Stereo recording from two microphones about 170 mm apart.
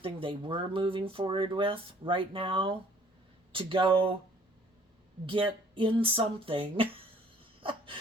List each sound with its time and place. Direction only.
0.0 s speech: 30° right (ahead or behind)
5.2 s speech: 30° right (ahead or behind)
7.6 s a sound: 30° right (ahead or behind)